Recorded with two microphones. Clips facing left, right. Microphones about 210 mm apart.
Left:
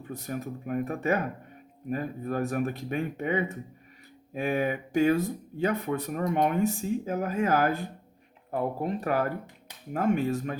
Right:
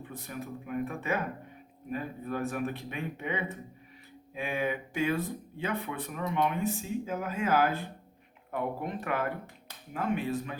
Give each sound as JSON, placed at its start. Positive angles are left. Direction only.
{"t": 0.0, "sound": "speech", "side_deg": 45}
{"t": 8.4, "sound": "speech", "side_deg": 35}